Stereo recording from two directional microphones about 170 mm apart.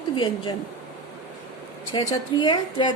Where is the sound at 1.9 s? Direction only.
30° left (ahead or behind).